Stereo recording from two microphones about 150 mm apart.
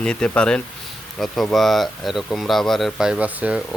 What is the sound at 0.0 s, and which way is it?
Speech, 5° left (ahead or behind).